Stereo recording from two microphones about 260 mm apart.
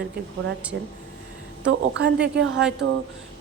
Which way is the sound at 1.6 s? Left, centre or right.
Right.